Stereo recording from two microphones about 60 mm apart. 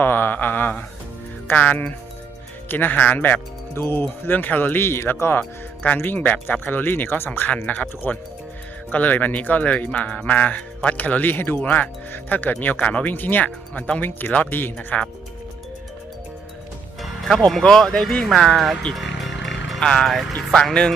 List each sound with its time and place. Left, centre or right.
0.0 s a sound: left
1.5 s speech: left
5.4 s speech: left
14.8 s speech: left
17.0 s music: centre
17.4 s speech: centre
18.9 s music: centre
20.7 s speech: centre